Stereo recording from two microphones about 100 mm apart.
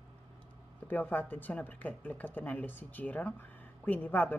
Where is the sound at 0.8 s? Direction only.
20° left (ahead or behind).